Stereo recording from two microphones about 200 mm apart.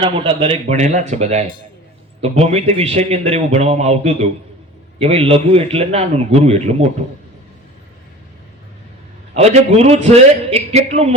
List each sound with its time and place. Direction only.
0.0 s speech: 25° right (ahead or behind)
9.3 s speech: 30° right (ahead or behind)